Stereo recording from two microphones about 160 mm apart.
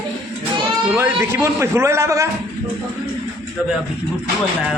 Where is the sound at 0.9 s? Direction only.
15° right (ahead or behind).